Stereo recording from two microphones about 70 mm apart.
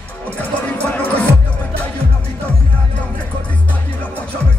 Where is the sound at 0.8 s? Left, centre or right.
Left.